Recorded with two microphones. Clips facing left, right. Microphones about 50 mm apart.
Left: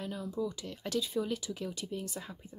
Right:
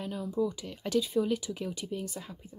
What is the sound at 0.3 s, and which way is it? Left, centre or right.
Speech, right.